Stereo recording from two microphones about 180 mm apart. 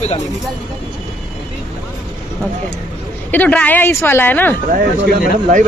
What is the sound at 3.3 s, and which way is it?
Speech, 10° left (ahead or behind).